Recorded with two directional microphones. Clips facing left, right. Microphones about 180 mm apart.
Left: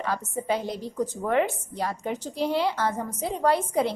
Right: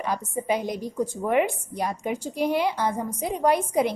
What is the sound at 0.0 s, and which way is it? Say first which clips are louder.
A woman's voice: right 1 dB; 15° right (ahead or behind).